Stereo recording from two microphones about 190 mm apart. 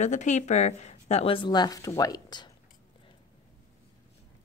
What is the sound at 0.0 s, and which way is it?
Speech, 40° left (ahead or behind).